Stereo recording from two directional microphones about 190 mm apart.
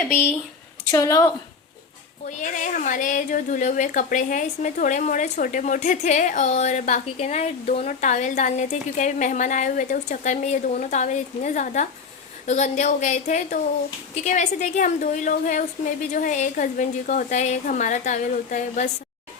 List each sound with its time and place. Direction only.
0.9 s a woman's voice: 20° left (ahead or behind)
2.3 s a woman's voice: 40° left (ahead or behind)